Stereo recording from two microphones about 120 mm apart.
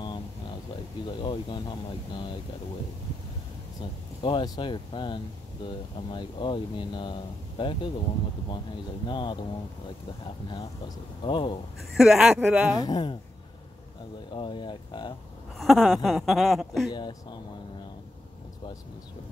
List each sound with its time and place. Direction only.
1.2 s speech: 40° left (ahead or behind)
4.2 s speech: 40° left (ahead or behind)
9.0 s speech: 40° left (ahead or behind)
11.2 s speech: 45° left (ahead or behind)
12.0 s speech: 5° right (ahead or behind)
12.8 s speech: 40° left (ahead or behind)
14.3 s speech: 40° left (ahead or behind)
15.5 s speech: centre (ahead or behind)
16.9 s speech: 40° left (ahead or behind)